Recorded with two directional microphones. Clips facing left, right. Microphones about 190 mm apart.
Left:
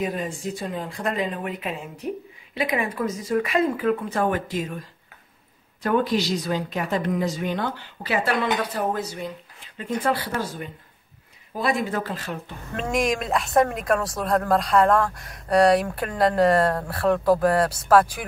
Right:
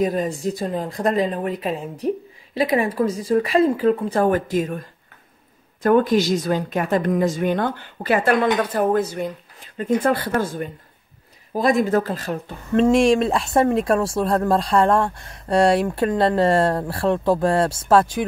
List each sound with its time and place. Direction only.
0.0 s speech: 40° right (ahead or behind)
5.8 s speech: 45° right (ahead or behind); by 18.1 s 25° right (ahead or behind)